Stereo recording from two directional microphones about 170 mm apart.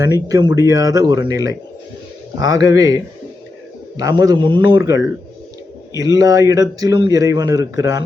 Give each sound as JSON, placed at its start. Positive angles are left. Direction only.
{"t": 0.3, "sound": "a man's voice", "side_deg": -20}